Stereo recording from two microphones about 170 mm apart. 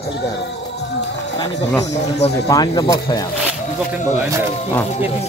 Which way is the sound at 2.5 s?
20° left (ahead or behind).